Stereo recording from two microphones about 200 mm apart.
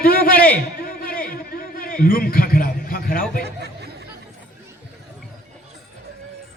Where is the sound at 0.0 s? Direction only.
45° left (ahead or behind).